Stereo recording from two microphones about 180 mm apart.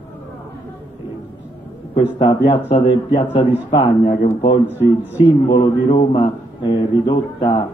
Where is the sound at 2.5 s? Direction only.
35° left (ahead or behind).